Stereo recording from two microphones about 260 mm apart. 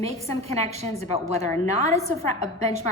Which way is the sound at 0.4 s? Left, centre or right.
Right.